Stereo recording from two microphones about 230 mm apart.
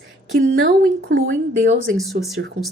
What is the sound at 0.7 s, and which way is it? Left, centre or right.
A woman's voice, right.